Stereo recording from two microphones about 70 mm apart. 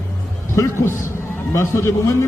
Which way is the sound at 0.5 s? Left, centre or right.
Left.